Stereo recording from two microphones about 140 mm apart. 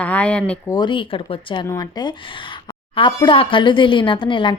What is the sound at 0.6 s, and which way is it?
A woman's voice, 30° left (ahead or behind).